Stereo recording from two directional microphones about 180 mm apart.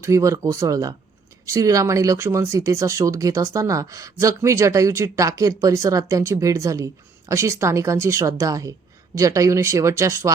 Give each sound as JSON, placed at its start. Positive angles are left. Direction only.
{"t": 0.0, "sound": "speech", "side_deg": -15}